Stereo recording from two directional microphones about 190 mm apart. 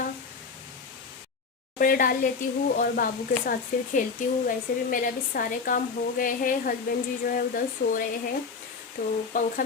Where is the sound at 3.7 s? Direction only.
45° left (ahead or behind).